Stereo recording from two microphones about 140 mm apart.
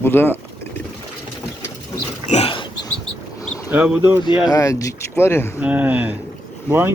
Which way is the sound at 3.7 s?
10° right (ahead or behind).